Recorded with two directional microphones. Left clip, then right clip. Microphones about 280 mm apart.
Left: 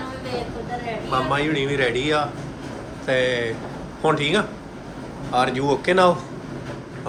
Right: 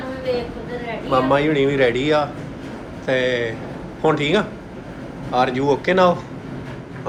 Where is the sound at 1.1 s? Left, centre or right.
Centre.